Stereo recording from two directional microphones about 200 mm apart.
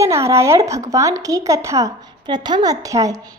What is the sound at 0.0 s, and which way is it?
A woman's voice, 15° right (ahead or behind).